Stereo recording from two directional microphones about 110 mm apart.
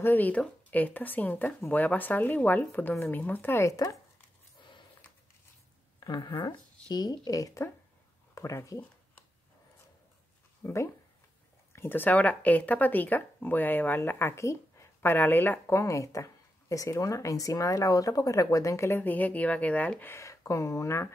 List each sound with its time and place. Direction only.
0.0 s speech: 15° left (ahead or behind)
5.9 s speech: 40° left (ahead or behind)
10.6 s speech: 25° left (ahead or behind)